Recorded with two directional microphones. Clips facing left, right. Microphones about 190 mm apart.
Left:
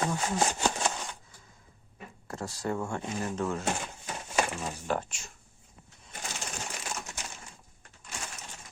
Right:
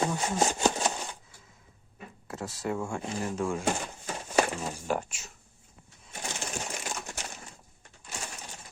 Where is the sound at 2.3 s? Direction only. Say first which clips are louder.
Even; centre (ahead or behind).